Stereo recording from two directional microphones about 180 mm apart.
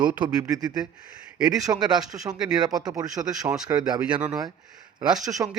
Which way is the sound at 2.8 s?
20° right (ahead or behind).